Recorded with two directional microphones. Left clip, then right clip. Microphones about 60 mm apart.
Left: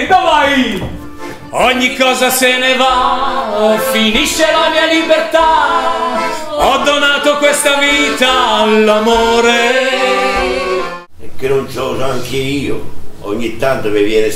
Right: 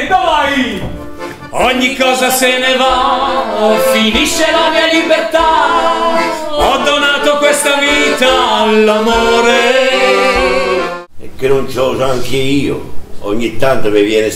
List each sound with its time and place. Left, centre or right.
0.1 s a sound: left
1.6 s music: centre
5.8 s a capella: right
6.6 s music: centre
10.3 s music: right
11.4 s a man's voice: right